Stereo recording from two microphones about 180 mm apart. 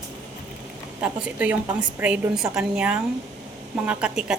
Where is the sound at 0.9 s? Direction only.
10° right (ahead or behind).